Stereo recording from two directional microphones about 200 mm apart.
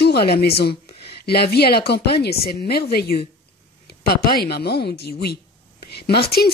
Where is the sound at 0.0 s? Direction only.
50° left (ahead or behind).